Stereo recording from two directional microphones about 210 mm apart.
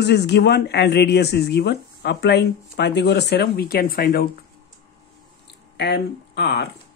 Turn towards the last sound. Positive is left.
turn(degrees=55)  # may be behind; listen again after turning